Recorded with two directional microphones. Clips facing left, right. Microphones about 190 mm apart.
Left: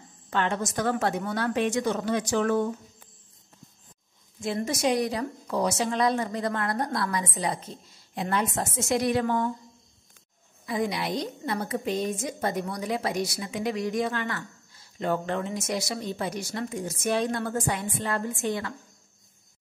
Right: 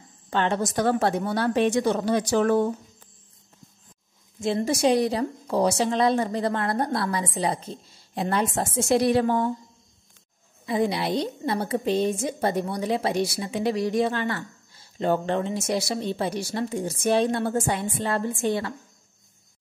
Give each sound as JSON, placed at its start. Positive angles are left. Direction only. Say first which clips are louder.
{"t": 0.3, "sound": "a woman's voice", "louder": "right 3 dB", "side_deg": -30}
{"t": 4.4, "sound": "a woman's voice", "louder": "right 5 dB", "side_deg": -25}
{"t": 10.6, "sound": "a woman's voice", "louder": "right 4 dB", "side_deg": -25}